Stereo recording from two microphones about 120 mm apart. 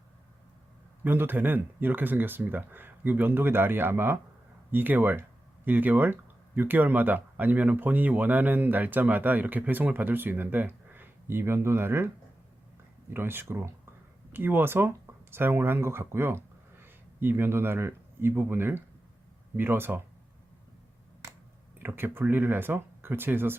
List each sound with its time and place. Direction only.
1.0 s speech: 20° right (ahead or behind)
13.1 s speech: 20° right (ahead or behind)
21.8 s speech: 15° right (ahead or behind)